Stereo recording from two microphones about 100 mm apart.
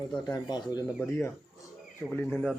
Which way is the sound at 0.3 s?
45° left (ahead or behind).